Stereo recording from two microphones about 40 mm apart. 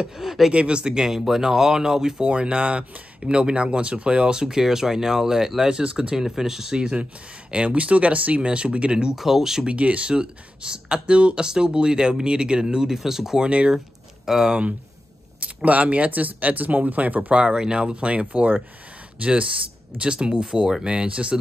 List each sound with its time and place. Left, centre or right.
0.0 s speech: centre
0.5 s speech: right
2.2 s speech: right
7.5 s speech: right
9.1 s speech: centre
9.7 s speech: right
10.1 s speech: right
12.9 s speech: centre
13.4 s speech: right
14.2 s speech: centre
14.5 s speech: right
17.6 s speech: right
20.0 s speech: right
20.9 s speech: right